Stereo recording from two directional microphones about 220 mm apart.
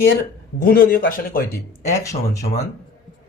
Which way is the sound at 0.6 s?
40° left (ahead or behind).